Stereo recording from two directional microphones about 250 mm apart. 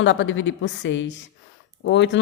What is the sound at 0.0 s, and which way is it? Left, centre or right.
A woman's voice, left.